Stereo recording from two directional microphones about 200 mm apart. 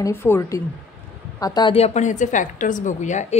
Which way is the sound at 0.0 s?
10° left (ahead or behind).